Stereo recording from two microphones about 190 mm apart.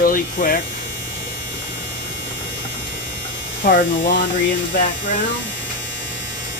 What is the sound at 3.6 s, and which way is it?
Speech, 45° left (ahead or behind).